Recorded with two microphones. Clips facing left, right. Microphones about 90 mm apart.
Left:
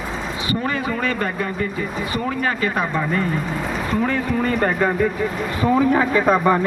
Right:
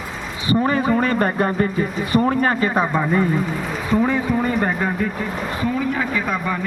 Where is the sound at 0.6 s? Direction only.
30° right (ahead or behind).